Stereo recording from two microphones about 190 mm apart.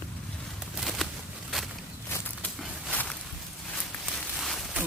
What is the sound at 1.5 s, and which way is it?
Walk, centre (ahead or behind).